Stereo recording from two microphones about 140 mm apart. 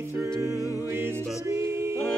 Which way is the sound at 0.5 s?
25° left (ahead or behind).